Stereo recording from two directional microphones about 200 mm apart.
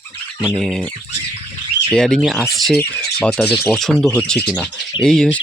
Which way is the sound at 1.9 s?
5° left (ahead or behind).